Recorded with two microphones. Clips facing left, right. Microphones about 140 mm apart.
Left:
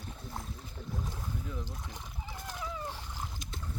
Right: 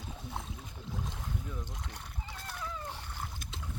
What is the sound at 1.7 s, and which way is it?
Splash, 10° left (ahead or behind).